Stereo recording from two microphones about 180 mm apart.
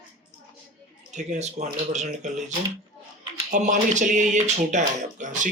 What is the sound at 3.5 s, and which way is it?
Speech, 40° right (ahead or behind).